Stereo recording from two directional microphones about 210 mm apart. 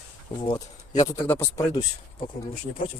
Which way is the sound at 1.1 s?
10° left (ahead or behind).